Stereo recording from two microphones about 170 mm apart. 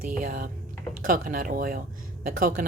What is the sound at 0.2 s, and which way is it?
Speech, 55° right (ahead or behind).